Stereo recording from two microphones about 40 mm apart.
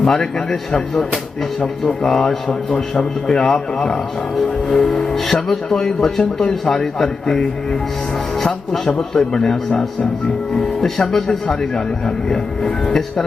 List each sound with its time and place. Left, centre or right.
0.0 s speech: centre
2.0 s speech: centre
9.0 s speech: centre
10.8 s speech: centre